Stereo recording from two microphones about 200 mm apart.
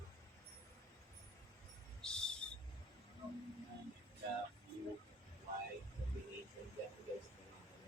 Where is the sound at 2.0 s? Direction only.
5° left (ahead or behind).